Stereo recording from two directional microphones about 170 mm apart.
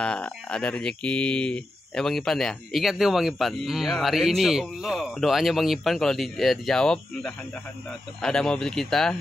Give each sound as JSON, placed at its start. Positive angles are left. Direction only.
{"t": 0.0, "sound": "speech", "side_deg": 5}